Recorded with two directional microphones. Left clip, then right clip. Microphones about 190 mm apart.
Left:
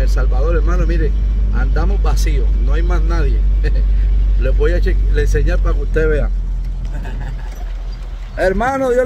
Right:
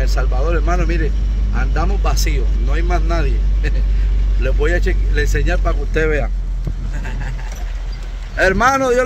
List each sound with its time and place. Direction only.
0.0 s speech: 5° right (ahead or behind)
8.4 s a man's voice: 15° left (ahead or behind)